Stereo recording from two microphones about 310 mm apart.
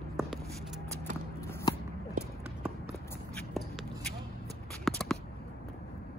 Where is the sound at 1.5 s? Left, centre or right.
Centre.